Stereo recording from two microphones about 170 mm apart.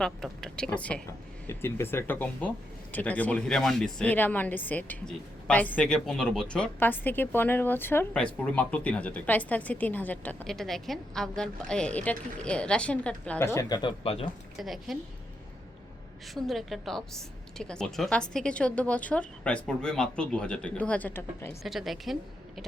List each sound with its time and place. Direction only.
0.0 s a woman's voice: 5° left (ahead or behind); by 13.9 s 25° left (ahead or behind)
14.0 s speech: 35° left (ahead or behind)
14.6 s a woman's voice: centre (ahead or behind)
16.3 s a woman's voice: centre (ahead or behind)
21.6 s a woman's voice: centre (ahead or behind)